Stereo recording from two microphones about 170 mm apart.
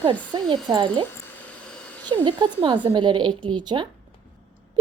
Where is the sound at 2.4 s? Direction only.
25° right (ahead or behind).